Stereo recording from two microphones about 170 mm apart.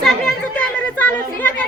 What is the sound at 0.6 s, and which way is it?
Speech, 10° left (ahead or behind).